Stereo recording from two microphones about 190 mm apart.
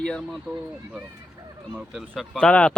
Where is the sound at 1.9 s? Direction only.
Centre (ahead or behind).